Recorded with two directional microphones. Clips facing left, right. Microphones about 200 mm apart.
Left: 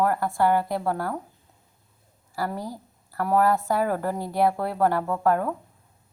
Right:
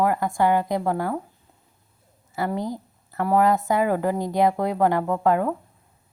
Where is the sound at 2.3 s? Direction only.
20° right (ahead or behind).